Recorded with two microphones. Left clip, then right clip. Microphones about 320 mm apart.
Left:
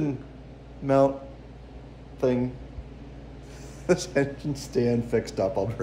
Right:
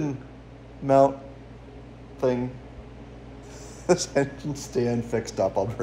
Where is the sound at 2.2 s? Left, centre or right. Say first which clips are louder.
Right 1 dB; centre.